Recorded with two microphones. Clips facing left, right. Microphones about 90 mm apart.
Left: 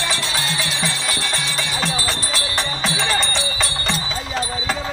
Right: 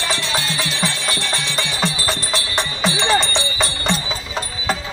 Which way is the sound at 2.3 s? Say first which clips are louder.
Right 1 dB; 20° right (ahead or behind).